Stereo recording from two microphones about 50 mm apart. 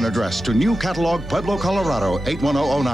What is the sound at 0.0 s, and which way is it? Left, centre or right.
Speech, centre.